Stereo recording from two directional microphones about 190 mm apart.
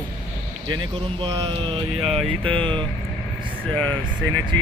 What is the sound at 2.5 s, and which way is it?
Speech, 25° right (ahead or behind).